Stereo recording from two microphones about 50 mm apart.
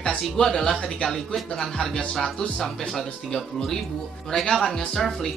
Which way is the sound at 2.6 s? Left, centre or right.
Centre.